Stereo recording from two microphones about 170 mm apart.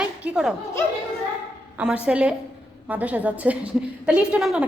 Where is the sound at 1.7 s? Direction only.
5° right (ahead or behind).